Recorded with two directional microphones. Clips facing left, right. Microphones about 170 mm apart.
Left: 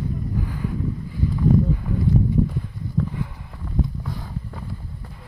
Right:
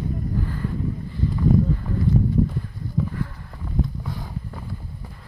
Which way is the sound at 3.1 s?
15° left (ahead or behind).